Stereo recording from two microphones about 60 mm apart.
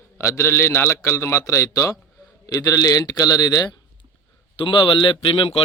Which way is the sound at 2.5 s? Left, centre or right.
Left.